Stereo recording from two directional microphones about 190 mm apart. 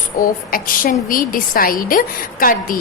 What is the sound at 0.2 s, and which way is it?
A woman's voice, 50° left (ahead or behind).